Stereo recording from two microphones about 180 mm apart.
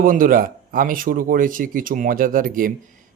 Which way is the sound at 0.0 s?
50° right (ahead or behind).